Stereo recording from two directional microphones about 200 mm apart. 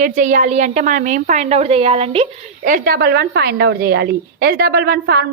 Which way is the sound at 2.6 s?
45° right (ahead or behind).